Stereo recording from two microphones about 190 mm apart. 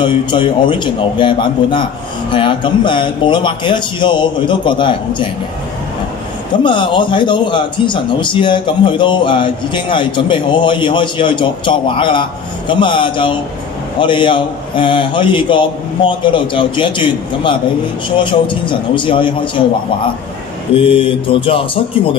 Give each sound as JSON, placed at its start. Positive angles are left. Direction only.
{"t": 0.0, "sound": "a man's voice", "side_deg": 25}
{"t": 6.6, "sound": "a man's voice", "side_deg": 25}
{"t": 20.7, "sound": "a man's voice", "side_deg": 30}